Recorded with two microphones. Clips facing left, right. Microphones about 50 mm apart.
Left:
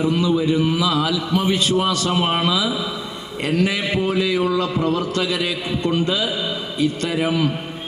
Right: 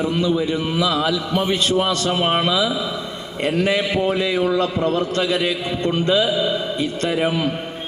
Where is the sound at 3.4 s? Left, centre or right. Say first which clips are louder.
Right 1 dB; right.